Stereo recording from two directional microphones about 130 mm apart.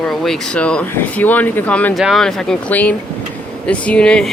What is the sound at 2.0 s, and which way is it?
Speech, centre (ahead or behind).